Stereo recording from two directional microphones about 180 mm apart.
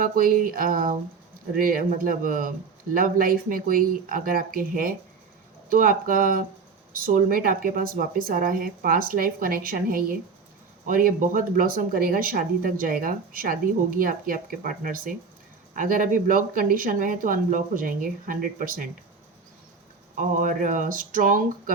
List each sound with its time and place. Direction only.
0.0 s speech: 50° right (ahead or behind)
20.1 s speech: 45° right (ahead or behind)